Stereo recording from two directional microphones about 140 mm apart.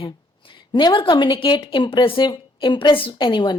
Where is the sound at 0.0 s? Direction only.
35° left (ahead or behind).